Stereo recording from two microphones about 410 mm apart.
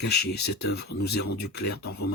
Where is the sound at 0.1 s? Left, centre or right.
Left.